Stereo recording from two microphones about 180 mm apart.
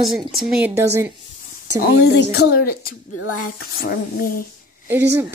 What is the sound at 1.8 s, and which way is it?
Speech, 65° left (ahead or behind).